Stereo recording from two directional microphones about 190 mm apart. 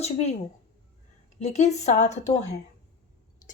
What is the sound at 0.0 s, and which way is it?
A woman's voice, 35° left (ahead or behind).